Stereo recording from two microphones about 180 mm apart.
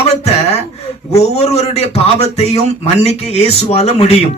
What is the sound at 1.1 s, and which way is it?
A man's voice, 40° left (ahead or behind).